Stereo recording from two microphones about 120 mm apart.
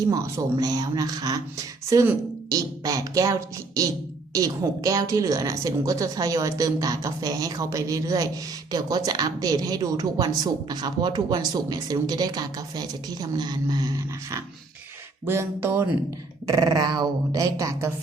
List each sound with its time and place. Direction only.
0.0 s speech: 25° right (ahead or behind)
2.5 s a woman's voice: 30° right (ahead or behind)
15.3 s a woman's voice: 20° right (ahead or behind)
16.5 s speech: 35° right (ahead or behind)